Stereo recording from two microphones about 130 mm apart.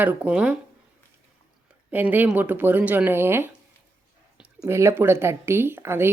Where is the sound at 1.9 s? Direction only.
15° right (ahead or behind).